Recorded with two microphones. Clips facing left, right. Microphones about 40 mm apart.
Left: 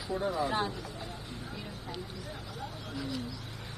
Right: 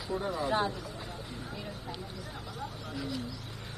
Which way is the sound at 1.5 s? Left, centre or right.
Centre.